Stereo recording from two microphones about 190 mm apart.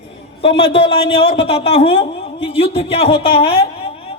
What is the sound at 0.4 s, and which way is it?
A man's voice, 30° left (ahead or behind).